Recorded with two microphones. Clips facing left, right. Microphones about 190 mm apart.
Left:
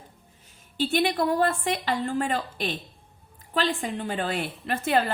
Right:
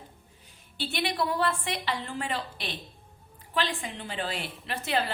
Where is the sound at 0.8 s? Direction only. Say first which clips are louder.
Left 6 dB; 45° left (ahead or behind).